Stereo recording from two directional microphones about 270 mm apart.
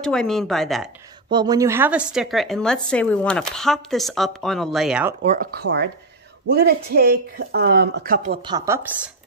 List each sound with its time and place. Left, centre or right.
0.0 s a woman's voice: centre
1.3 s a woman's voice: centre
5.2 s speech: right
8.4 s speech: centre